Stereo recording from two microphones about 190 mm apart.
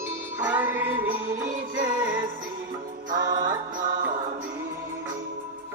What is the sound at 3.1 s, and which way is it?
Music, 20° right (ahead or behind).